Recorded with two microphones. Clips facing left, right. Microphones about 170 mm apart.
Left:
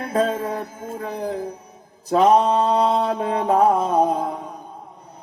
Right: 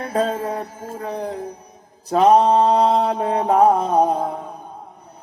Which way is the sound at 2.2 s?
35° right (ahead or behind).